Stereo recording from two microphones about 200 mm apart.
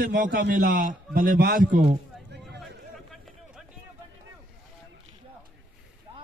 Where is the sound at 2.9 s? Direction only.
Centre (ahead or behind).